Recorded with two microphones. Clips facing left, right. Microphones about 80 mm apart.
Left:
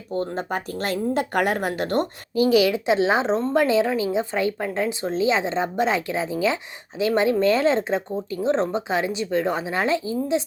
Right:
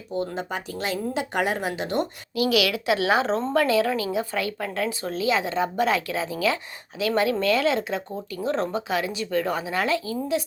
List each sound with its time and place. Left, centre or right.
0.1 s speech: left
2.3 s speech: left